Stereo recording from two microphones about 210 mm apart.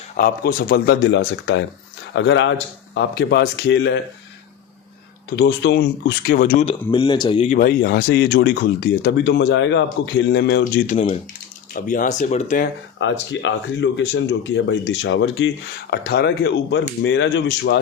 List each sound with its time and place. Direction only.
0.2 s speech: 45° left (ahead or behind)
5.4 s speech: 50° left (ahead or behind)
6.9 s speech: 20° left (ahead or behind)
7.6 s speech: 45° left (ahead or behind)
10.6 s speech: 35° left (ahead or behind)
13.0 s speech: 60° left (ahead or behind)